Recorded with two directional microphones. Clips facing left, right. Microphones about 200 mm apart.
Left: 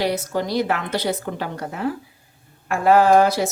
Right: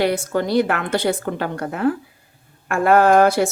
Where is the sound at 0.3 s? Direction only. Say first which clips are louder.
Right 3 dB; 55° right (ahead or behind).